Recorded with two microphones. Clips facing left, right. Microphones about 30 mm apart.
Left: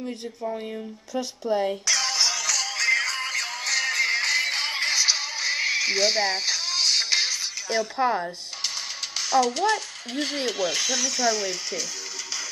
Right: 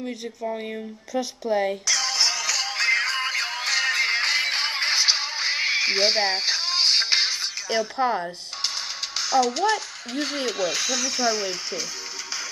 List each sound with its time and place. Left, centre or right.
1.1 s speech: centre
1.7 s music: centre
2.1 s music: centre
7.8 s speech: centre
11.1 s speech: centre